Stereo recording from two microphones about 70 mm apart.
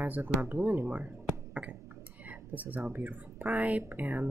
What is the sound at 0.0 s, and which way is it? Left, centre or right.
Speech, right.